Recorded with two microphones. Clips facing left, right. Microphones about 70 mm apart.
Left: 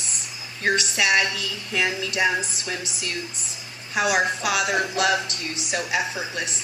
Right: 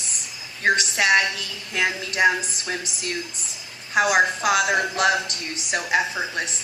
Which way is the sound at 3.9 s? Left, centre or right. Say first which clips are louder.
Right 3 dB; right.